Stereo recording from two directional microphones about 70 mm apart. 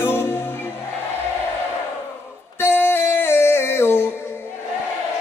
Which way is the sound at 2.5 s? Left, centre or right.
Left.